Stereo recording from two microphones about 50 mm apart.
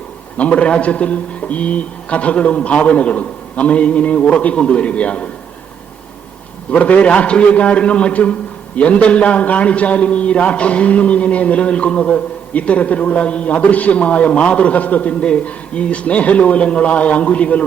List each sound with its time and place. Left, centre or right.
0.3 s a man's voice: left
6.7 s a man's voice: left